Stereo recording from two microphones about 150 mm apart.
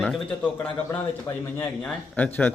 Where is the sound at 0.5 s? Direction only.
15° left (ahead or behind).